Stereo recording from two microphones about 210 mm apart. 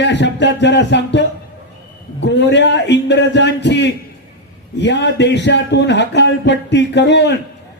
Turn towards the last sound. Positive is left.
turn(degrees=55)  # may be behind; listen again after turning